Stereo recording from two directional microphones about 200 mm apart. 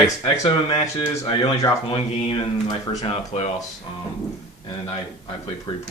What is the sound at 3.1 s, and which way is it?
Speech, 30° left (ahead or behind).